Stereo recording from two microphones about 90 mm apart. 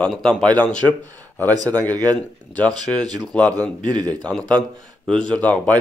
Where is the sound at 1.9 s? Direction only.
20° left (ahead or behind).